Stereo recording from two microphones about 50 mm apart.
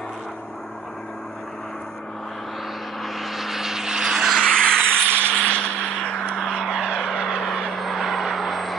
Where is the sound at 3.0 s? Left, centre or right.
Centre.